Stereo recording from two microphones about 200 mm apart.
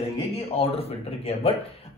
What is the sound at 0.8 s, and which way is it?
Speech, 30° left (ahead or behind).